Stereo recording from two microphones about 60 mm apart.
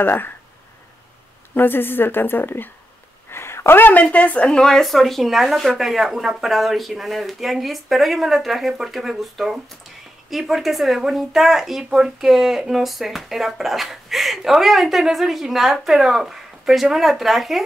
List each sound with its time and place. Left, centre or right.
0.0 s a woman's voice: left
1.5 s a woman's voice: left
3.3 s speech: left; by 17.6 s centre